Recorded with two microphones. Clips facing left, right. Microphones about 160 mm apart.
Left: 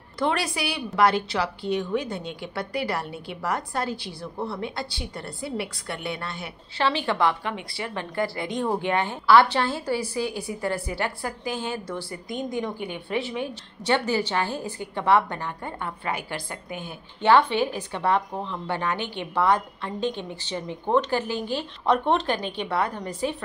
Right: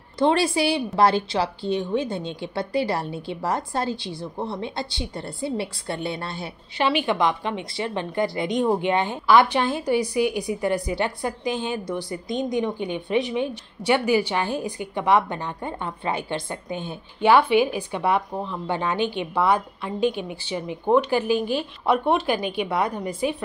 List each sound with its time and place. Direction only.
0.2 s a woman's voice: 25° right (ahead or behind)
6.8 s a woman's voice: 15° right (ahead or behind)
17.2 s speech: 10° right (ahead or behind)